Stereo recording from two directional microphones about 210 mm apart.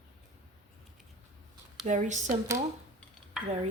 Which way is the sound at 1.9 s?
35° right (ahead or behind).